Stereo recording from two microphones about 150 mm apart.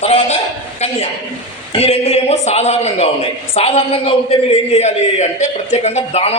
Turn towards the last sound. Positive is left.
turn(degrees=45)  # may be behind; listen again after turning